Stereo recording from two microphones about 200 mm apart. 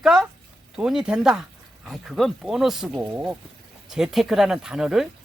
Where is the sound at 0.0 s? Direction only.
5° right (ahead or behind).